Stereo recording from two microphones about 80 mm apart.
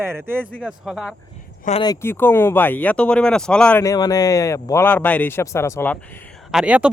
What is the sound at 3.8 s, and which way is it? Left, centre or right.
Speech, left.